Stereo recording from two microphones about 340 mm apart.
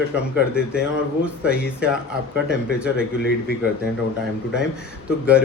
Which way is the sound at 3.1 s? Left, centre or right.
Left.